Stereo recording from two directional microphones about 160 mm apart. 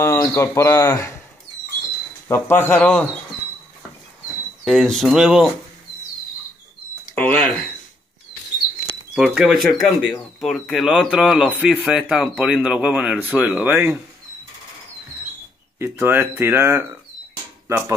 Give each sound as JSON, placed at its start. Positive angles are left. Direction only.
{"t": 0.0, "sound": "speech", "side_deg": 15}
{"t": 2.2, "sound": "speech", "side_deg": 15}
{"t": 4.6, "sound": "speech", "side_deg": 0}
{"t": 7.2, "sound": "speech", "side_deg": 10}
{"t": 9.1, "sound": "speech", "side_deg": -5}
{"t": 15.8, "sound": "speech", "side_deg": -15}